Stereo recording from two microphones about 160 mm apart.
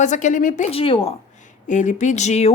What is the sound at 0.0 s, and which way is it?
Speech, 50° left (ahead or behind).